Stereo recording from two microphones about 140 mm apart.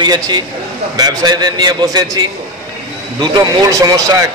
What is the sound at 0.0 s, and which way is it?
A man's voice, 30° right (ahead or behind).